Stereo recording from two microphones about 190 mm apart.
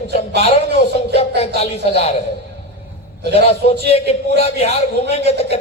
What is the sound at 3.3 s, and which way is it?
A man's voice, 35° left (ahead or behind).